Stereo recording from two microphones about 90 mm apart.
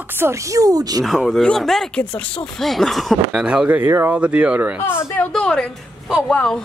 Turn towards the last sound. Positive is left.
turn(degrees=10)  # may be behind; listen again after turning